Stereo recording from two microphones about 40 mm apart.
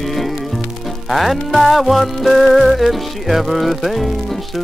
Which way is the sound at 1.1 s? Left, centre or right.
Centre.